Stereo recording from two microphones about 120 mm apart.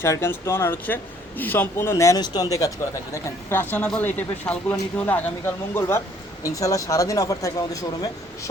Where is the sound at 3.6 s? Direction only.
15° left (ahead or behind).